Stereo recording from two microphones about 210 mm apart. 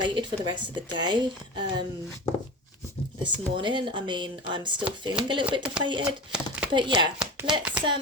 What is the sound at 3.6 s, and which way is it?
A woman's voice, 25° right (ahead or behind).